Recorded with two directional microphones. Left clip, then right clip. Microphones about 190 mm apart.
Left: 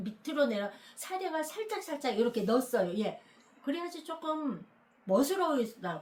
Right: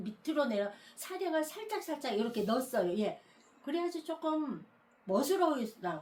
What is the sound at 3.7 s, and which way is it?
Speech, 25° left (ahead or behind).